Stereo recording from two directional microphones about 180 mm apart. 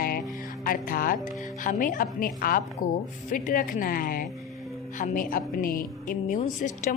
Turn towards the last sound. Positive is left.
turn(degrees=45)  # may be behind; listen again after turning